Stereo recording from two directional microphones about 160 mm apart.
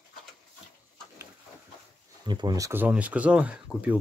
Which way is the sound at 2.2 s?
25° right (ahead or behind).